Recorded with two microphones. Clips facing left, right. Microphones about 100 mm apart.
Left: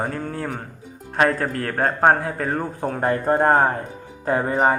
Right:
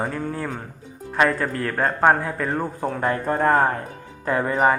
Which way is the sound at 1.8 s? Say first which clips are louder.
Left 1 dB; 45° left (ahead or behind).